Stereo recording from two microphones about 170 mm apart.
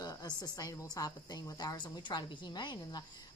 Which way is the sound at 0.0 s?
25° left (ahead or behind).